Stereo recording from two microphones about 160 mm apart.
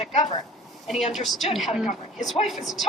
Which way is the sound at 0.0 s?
45° left (ahead or behind).